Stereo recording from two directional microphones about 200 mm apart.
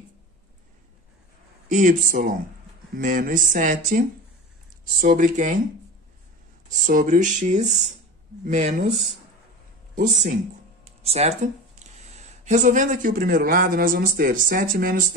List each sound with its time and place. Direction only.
1.7 s speech: 40° right (ahead or behind)
6.7 s speech: 40° right (ahead or behind)
10.8 s speech: 30° right (ahead or behind)